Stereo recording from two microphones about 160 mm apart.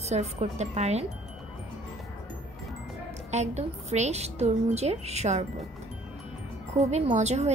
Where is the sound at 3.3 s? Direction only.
45° right (ahead or behind).